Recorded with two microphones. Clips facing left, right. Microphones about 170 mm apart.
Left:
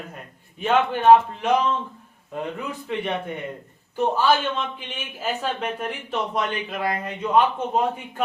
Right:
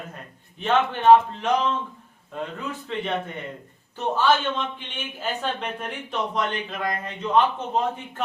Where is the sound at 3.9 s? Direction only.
10° left (ahead or behind).